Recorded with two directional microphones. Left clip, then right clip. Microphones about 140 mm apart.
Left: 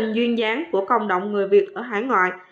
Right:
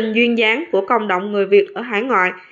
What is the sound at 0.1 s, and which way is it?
Speech, 15° right (ahead or behind).